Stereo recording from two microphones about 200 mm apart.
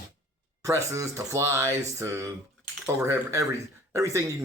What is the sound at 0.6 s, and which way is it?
Speech, 15° right (ahead or behind).